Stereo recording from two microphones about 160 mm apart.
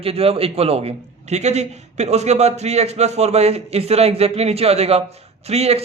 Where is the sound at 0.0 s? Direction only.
35° right (ahead or behind).